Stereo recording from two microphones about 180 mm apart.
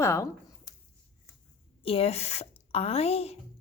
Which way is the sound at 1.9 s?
35° left (ahead or behind).